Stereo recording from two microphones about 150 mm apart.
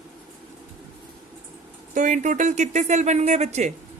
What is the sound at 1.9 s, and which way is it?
Speech, 60° right (ahead or behind).